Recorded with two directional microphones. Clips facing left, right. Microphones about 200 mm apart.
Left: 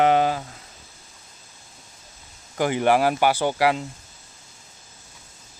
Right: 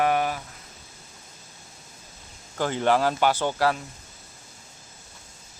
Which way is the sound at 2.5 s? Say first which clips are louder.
Left 3 dB; 10° left (ahead or behind).